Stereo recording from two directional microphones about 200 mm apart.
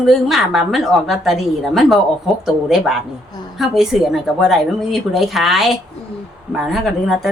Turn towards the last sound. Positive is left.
turn(degrees=0)  # may be behind; listen again after turning